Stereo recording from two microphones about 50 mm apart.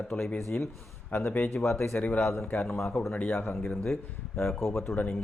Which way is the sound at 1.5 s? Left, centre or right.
Left.